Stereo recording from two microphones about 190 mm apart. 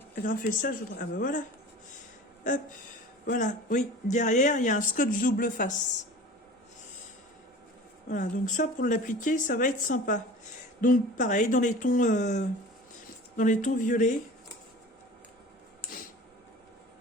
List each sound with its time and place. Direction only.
0.4 s speech: 45° left (ahead or behind)
2.5 s speech: 40° left (ahead or behind)
8.1 s speech: 45° left (ahead or behind)